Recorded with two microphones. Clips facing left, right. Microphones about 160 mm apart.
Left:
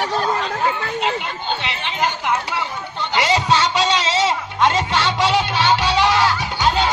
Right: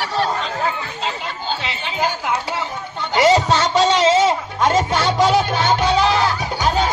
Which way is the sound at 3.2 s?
40° right (ahead or behind).